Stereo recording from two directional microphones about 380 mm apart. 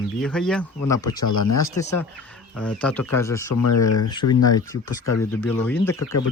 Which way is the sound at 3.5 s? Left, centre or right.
Left.